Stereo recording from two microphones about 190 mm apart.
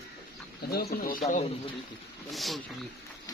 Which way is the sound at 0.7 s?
55° left (ahead or behind).